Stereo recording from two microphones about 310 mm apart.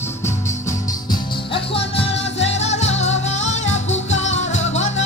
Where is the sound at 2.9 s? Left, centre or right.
Left.